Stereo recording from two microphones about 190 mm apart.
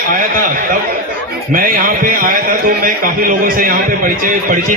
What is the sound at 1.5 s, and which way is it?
A man's voice, 45° right (ahead or behind).